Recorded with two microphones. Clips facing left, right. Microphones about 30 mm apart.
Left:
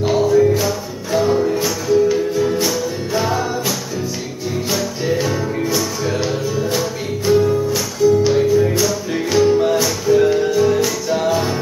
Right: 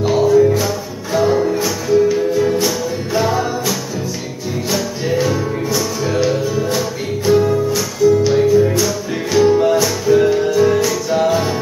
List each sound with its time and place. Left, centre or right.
0.2 s music: centre
1.2 s music: centre
1.5 s music: centre
7.7 s music: centre
8.3 s music: centre